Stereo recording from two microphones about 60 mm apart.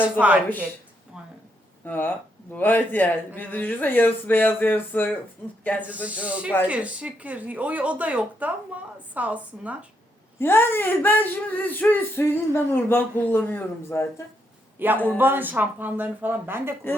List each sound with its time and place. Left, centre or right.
0.0 s speech: right
1.8 s speech: left
5.8 s speech: right
10.4 s speech: left
14.9 s a man's voice: left
15.2 s speech: right